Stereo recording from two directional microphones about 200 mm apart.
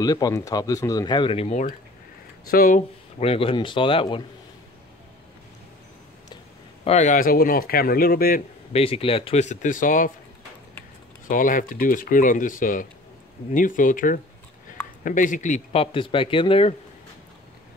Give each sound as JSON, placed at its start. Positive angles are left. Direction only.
{"t": 0.0, "sound": "speech", "side_deg": 20}
{"t": 2.4, "sound": "speech", "side_deg": 45}
{"t": 3.2, "sound": "speech", "side_deg": 30}
{"t": 6.8, "sound": "speech", "side_deg": 35}
{"t": 8.7, "sound": "speech", "side_deg": 30}
{"t": 11.2, "sound": "speech", "side_deg": 40}